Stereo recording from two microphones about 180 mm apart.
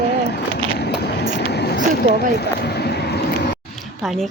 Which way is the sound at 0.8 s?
65° left (ahead or behind).